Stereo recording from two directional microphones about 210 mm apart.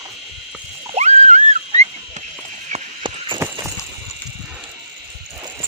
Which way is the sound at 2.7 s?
25° right (ahead or behind).